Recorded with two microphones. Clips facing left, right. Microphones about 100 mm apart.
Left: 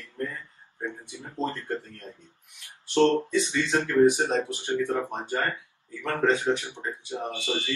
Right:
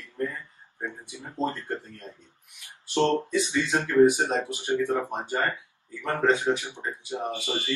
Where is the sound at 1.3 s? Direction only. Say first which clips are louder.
Right 1 dB; 15° right (ahead or behind).